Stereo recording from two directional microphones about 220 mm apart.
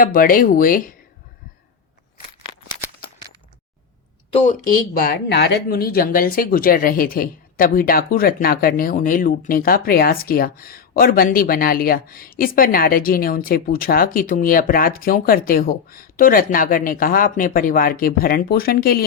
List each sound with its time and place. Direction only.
0.0 s speech: 40° left (ahead or behind)
4.9 s speech: 45° left (ahead or behind)